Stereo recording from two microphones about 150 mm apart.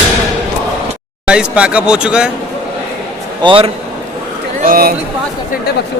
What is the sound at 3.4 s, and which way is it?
Speech, 40° right (ahead or behind).